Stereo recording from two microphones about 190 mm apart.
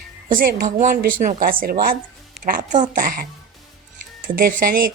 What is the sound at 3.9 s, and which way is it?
Music, 50° right (ahead or behind).